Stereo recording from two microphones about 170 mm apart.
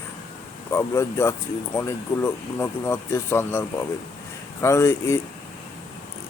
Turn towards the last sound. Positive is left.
turn(degrees=15)  # may be behind; listen again after turning